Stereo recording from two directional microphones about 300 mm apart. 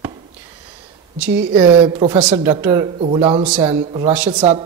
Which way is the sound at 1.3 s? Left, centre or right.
Right.